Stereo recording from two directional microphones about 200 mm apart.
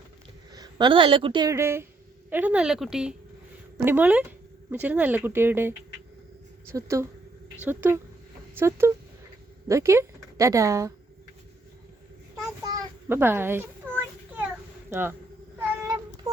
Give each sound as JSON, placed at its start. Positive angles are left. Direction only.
{"t": 0.5, "sound": "a woman's voice", "side_deg": -20}
{"t": 6.7, "sound": "speech", "side_deg": -15}
{"t": 13.1, "sound": "a sound", "side_deg": -10}
{"t": 14.8, "sound": "speech", "side_deg": -10}
{"t": 15.5, "sound": "child singing", "side_deg": -15}